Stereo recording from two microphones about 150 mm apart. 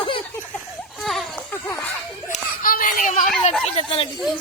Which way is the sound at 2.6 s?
65° left (ahead or behind).